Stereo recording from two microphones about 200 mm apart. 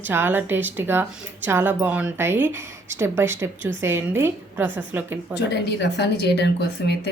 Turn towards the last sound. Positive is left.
turn(degrees=55)  # may be behind; listen again after turning